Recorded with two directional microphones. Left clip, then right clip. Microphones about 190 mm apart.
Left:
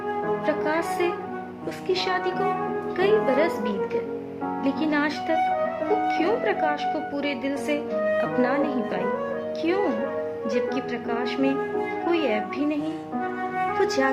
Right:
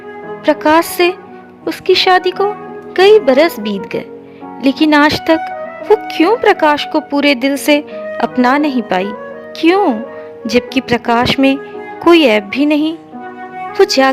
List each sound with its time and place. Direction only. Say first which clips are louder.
0.4 s speech: right 18 dB; 55° right (ahead or behind)
5.4 s music: right 1 dB; centre (ahead or behind)
6.1 s speech: right 12 dB; 55° right (ahead or behind)
13.7 s speech: right 15 dB; 45° right (ahead or behind)